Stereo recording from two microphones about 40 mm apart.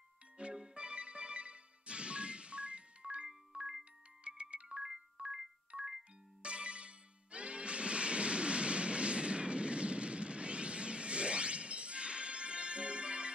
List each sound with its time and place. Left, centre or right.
0.4 s music: right
4.2 s music: right
4.7 s music: centre